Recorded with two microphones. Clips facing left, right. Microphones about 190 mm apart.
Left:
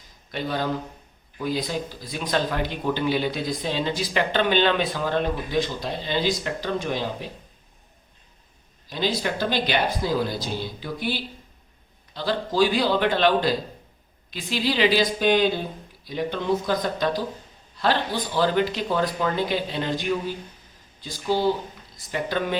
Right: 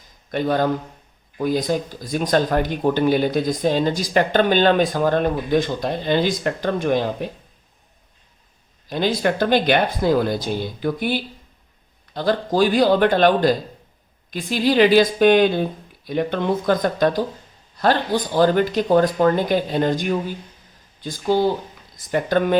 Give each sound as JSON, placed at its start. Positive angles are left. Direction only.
{"t": 0.3, "sound": "speech", "side_deg": -50}
{"t": 8.9, "sound": "speech", "side_deg": -50}